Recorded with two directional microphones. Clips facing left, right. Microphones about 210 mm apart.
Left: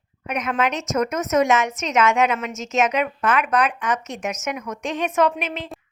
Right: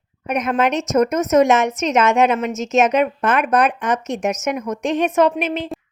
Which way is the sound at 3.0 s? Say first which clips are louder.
Right 4 dB; 40° right (ahead or behind).